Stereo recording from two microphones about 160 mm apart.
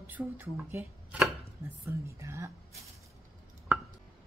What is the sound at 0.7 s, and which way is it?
Chopping, 10° right (ahead or behind).